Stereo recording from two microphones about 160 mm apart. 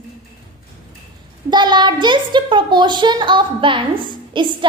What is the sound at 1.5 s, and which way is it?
A child's voice, 30° right (ahead or behind).